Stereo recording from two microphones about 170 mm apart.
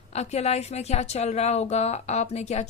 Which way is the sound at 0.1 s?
40° left (ahead or behind).